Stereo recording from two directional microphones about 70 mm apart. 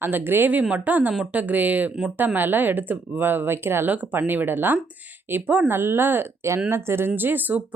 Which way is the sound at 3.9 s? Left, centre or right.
Right.